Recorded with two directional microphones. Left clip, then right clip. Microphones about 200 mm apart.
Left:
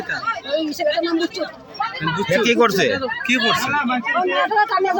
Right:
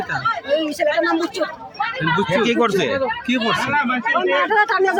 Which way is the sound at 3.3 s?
30° right (ahead or behind).